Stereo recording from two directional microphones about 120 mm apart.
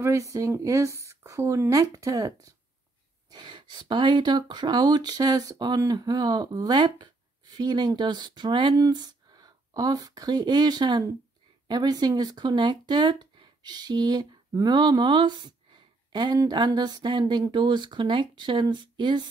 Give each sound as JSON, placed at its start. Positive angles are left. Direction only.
{"t": 0.0, "sound": "speech", "side_deg": -25}